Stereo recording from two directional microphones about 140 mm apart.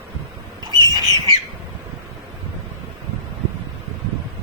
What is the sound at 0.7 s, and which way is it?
Bird, 30° right (ahead or behind).